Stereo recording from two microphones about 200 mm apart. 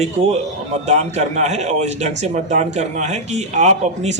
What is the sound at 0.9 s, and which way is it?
A man's voice, 35° right (ahead or behind).